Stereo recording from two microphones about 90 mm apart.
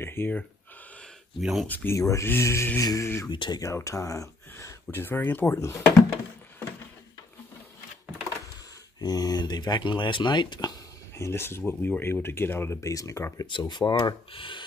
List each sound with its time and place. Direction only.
0.0 s speech: 25° left (ahead or behind)
1.4 s speech: 5° right (ahead or behind)
1.7 s speech: 20° left (ahead or behind)
2.0 s speech: 35° left (ahead or behind)
2.8 s speech: 40° left (ahead or behind)
3.3 s speech: 55° left (ahead or behind)
3.6 s speech: 35° left (ahead or behind)
5.6 s speech: 35° left (ahead or behind)
9.0 s speech: 45° left (ahead or behind)
11.1 s speech: 30° left (ahead or behind)
12.9 s speech: 35° left (ahead or behind)
13.5 s speech: 55° left (ahead or behind)
14.3 s speech: 75° left (ahead or behind)